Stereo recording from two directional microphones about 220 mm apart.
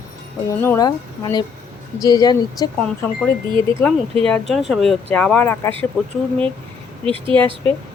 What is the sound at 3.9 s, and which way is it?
A woman's voice, 5° left (ahead or behind).